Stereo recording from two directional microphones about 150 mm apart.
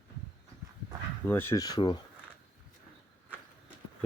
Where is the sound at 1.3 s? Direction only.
15° left (ahead or behind).